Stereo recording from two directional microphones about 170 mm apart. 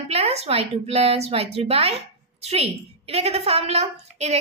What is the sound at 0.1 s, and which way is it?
A woman's voice, 35° right (ahead or behind).